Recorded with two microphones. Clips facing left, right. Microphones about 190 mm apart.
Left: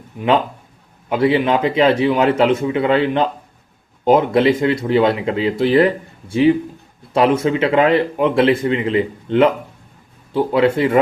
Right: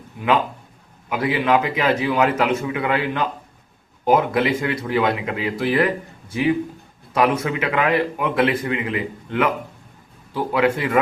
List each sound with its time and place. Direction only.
1.1 s speech: 30° left (ahead or behind)